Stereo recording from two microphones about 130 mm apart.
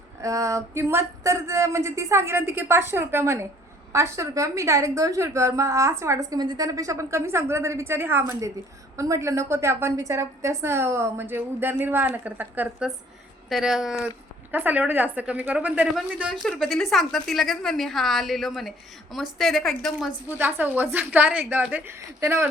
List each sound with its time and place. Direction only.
0.2 s a woman's voice: 25° right (ahead or behind); by 14.1 s 5° right (ahead or behind)
14.5 s a woman's voice: 15° right (ahead or behind)
20.4 s speech: 15° right (ahead or behind)